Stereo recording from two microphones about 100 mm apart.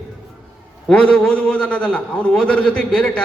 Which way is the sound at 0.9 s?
10° left (ahead or behind).